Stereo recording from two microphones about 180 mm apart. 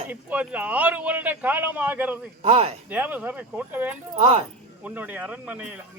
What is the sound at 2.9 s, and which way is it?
Speech, 10° right (ahead or behind).